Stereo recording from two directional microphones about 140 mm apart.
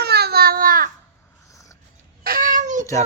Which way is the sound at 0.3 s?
90° right.